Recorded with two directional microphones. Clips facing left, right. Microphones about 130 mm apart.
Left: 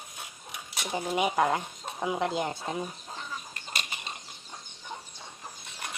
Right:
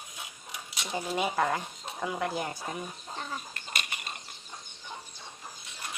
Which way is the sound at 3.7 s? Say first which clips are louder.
Even; 30° left (ahead or behind).